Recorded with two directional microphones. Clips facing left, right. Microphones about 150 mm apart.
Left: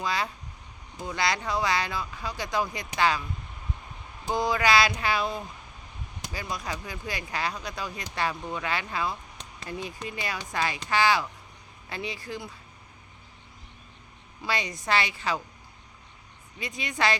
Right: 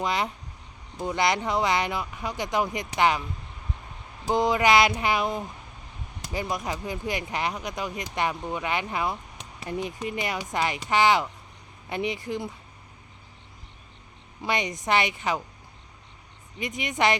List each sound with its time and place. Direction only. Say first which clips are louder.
0.0 s speech: right 3 dB; 20° right (ahead or behind)
4.3 s speech: right 3 dB; 20° right (ahead or behind)
14.4 s speech: right 3 dB; 20° right (ahead or behind)
16.6 s speech: right 3 dB; 20° right (ahead or behind)